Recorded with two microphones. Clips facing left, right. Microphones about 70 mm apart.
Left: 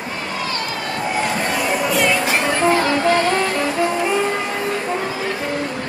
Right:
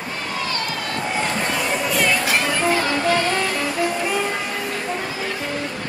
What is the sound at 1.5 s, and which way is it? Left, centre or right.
Music, centre.